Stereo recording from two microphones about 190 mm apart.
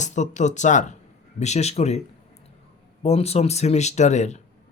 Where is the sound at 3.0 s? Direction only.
30° left (ahead or behind).